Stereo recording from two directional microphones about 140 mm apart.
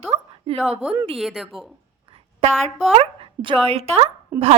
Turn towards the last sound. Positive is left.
turn(degrees=-15)  # may be behind; listen again after turning